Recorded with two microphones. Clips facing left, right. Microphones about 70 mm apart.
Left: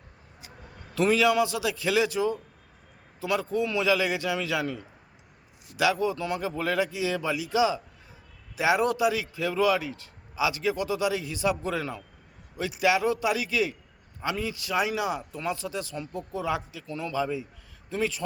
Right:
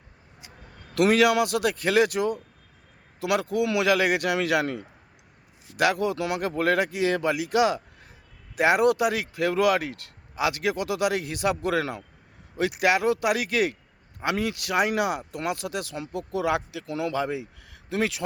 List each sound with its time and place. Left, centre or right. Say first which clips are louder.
0.9 s speech: right 2 dB; right
3.2 s speech: right 3 dB; right
5.7 s speech: right 2 dB; right
6.6 s speech: right 5 dB; right
12.5 s speech: right 2 dB; right
15.3 s speech: right 2 dB; right